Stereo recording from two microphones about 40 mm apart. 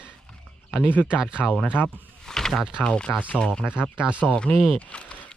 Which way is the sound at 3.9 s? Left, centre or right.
Right.